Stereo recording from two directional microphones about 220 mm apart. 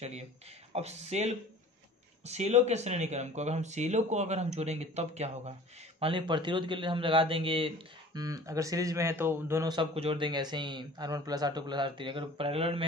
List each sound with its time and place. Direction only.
0.7 s a man's voice: 30° right (ahead or behind)